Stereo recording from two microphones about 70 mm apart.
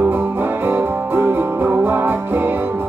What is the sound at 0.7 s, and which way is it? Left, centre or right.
Music, right.